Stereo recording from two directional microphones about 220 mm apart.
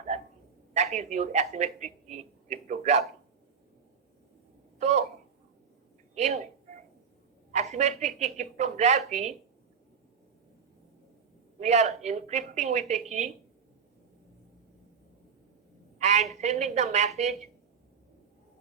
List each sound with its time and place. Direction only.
0.7 s a woman's voice: 30° right (ahead or behind)
4.8 s a sound: 30° right (ahead or behind)
6.1 s a sound: 30° right (ahead or behind)
7.5 s a woman's voice: 30° right (ahead or behind)
11.6 s a woman's voice: 30° right (ahead or behind)
16.0 s a woman's voice: 30° right (ahead or behind)